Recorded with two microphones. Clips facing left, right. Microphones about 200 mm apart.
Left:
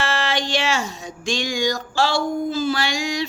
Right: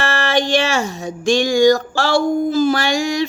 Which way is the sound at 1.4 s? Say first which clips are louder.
Right 11 dB; 45° right (ahead or behind).